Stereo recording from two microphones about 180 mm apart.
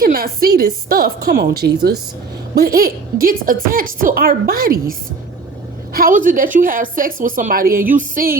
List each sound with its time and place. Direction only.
0.0 s a woman's voice: 55° right (ahead or behind)